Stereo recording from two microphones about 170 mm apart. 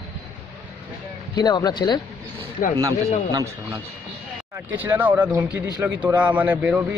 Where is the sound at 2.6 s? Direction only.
55° left (ahead or behind).